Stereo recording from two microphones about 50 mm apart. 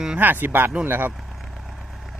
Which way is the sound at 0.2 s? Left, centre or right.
Right.